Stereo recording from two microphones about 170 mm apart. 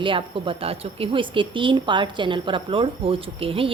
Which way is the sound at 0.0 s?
30° right (ahead or behind).